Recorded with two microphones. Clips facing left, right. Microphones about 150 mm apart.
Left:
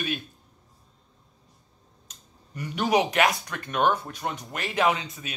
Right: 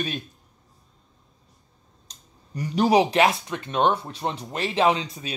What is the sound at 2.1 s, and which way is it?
Speech, 35° right (ahead or behind).